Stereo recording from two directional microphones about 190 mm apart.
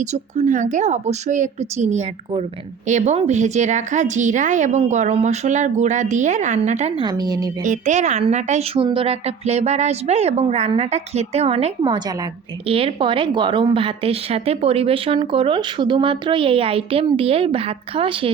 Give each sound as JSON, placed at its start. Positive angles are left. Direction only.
{"t": 0.0, "sound": "a woman's voice", "side_deg": -40}
{"t": 7.0, "sound": "a woman's voice", "side_deg": -20}
{"t": 7.6, "sound": "a woman's voice", "side_deg": -40}